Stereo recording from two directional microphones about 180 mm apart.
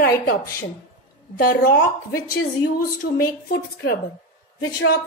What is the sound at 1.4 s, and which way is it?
A woman's voice, 55° left (ahead or behind).